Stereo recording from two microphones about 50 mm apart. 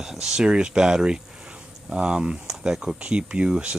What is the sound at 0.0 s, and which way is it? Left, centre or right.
Speech, centre.